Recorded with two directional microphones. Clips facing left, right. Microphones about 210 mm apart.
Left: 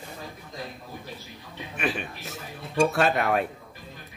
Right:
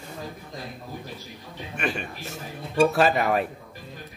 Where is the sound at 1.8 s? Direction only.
Centre (ahead or behind).